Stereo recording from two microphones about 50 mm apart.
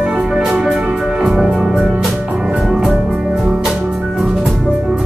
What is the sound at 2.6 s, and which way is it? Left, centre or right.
Music, centre.